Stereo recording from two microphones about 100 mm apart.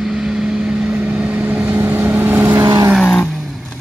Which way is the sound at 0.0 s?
5° right (ahead or behind).